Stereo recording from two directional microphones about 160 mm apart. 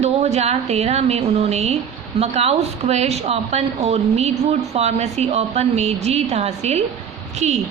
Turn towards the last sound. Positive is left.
turn(degrees=-45)  # may be behind; listen again after turning